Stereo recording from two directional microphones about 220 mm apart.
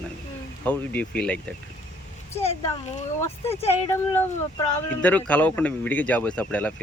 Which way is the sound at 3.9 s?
10° left (ahead or behind).